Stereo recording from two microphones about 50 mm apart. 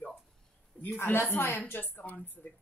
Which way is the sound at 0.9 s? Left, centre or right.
Left.